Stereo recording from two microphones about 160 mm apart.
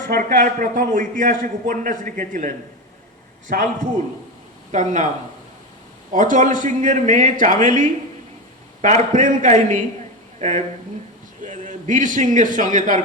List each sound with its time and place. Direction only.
0.0 s a man's voice: 55° right (ahead or behind)
3.5 s a man's voice: 50° right (ahead or behind)
6.1 s a man's voice: 50° right (ahead or behind)